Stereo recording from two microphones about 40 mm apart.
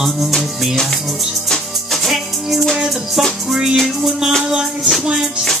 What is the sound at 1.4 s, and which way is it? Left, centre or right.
Music, centre.